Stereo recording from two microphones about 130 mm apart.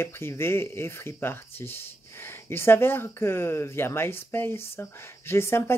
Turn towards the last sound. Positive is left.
turn(degrees=20)  # may be behind; listen again after turning